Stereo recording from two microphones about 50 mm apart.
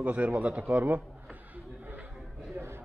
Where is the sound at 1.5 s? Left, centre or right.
Right.